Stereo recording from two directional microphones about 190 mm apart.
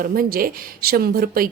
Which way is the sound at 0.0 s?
50° right (ahead or behind).